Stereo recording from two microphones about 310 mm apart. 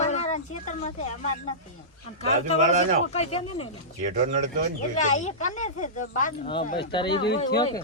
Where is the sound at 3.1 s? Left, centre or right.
Centre.